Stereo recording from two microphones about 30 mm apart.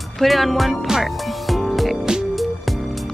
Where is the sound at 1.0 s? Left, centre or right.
Centre.